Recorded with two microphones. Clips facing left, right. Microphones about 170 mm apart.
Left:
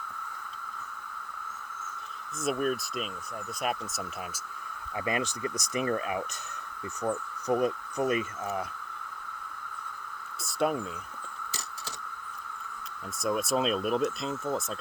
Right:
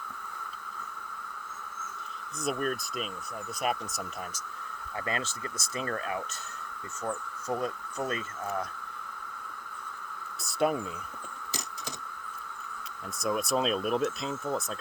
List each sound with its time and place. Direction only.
2.4 s speech: centre (ahead or behind)
5.0 s speech: 15° left (ahead or behind)
10.4 s speech: centre (ahead or behind)
13.2 s speech: centre (ahead or behind)